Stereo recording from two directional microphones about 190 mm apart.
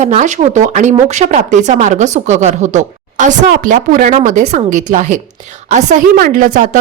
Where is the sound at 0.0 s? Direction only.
40° right (ahead or behind).